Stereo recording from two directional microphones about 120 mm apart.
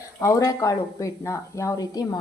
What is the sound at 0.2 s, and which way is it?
Speech, 25° left (ahead or behind).